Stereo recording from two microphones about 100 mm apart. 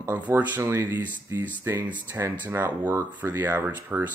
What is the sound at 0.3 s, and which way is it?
Speech, 25° right (ahead or behind).